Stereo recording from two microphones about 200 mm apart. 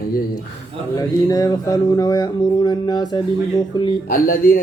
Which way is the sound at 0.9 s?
20° left (ahead or behind).